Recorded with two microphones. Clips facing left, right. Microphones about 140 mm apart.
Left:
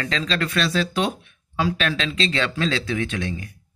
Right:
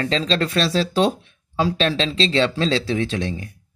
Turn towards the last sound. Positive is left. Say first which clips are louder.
# right 3 dB
turn(degrees=-35)  # may be behind; listen again after turning